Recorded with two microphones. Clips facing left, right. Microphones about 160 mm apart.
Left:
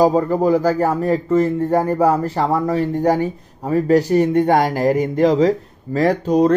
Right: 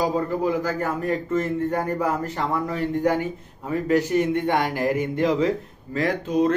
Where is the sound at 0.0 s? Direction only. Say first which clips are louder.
Left 8 dB; 40° left (ahead or behind).